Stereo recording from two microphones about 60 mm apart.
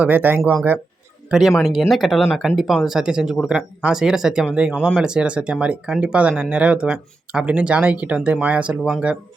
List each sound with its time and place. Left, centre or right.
0.0 s speech: right
1.3 s speech: centre; by 8.8 s right